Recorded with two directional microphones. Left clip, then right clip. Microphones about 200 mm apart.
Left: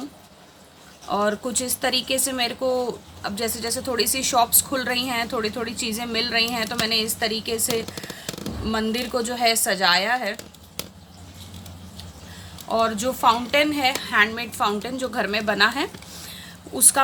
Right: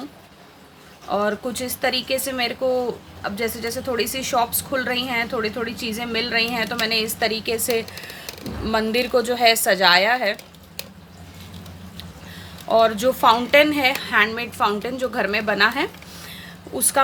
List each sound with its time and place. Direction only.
1.1 s a woman's voice: 10° left (ahead or behind); by 10.3 s 20° right (ahead or behind)
12.6 s a woman's voice: 15° right (ahead or behind); by 17.0 s centre (ahead or behind)